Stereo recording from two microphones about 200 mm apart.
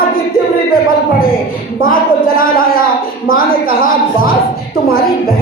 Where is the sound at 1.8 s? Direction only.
45° left (ahead or behind).